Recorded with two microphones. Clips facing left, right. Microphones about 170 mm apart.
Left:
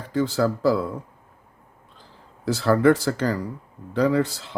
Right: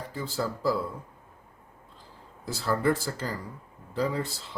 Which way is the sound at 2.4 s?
80° left.